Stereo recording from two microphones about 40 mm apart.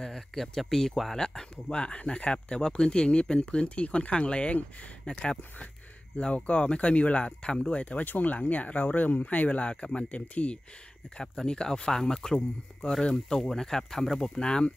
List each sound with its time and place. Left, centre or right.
0.0 s speech: centre
1.1 s speech: centre
1.8 s speech: left
8.0 s speech: left
11.1 s speech: left
14.2 s speech: centre